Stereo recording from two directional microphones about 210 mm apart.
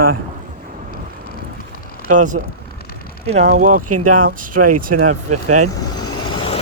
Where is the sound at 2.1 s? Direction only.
35° right (ahead or behind).